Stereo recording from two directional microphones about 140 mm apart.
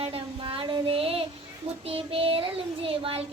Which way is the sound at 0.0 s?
40° right (ahead or behind).